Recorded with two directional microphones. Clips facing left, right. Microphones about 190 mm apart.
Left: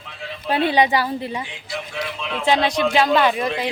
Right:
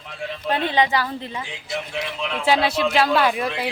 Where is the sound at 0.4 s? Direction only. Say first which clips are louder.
Left 3 dB; 10° left (ahead or behind).